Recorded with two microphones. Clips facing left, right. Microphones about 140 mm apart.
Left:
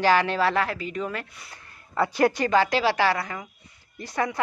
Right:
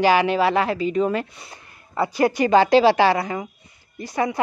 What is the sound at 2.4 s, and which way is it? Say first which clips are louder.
A woman's voice: right 7 dB; 25° right (ahead or behind).